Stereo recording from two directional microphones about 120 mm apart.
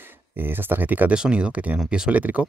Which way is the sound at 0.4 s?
15° right (ahead or behind).